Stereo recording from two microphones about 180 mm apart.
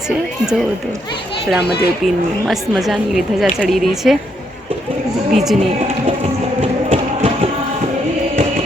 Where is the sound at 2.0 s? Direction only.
Centre (ahead or behind).